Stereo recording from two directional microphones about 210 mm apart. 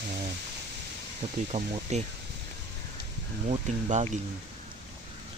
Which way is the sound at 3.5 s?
35° right (ahead or behind).